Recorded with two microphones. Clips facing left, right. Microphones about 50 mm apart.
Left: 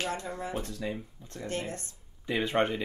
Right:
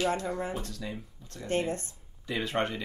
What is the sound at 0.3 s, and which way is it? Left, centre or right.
Speech, right.